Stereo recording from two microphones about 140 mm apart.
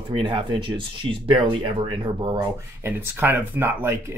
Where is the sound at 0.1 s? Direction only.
40° right (ahead or behind).